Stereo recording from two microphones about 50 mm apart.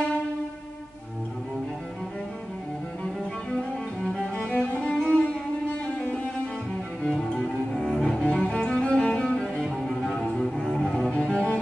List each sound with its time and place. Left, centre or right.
4.5 s music: left
4.9 s music: centre
7.3 s cello: centre
9.6 s music: centre
11.1 s cello: centre